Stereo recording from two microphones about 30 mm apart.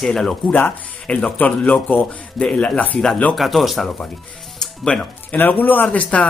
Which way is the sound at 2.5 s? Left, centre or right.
Left.